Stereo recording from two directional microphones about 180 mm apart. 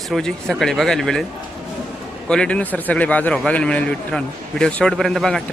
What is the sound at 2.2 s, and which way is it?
A man's voice, 5° left (ahead or behind).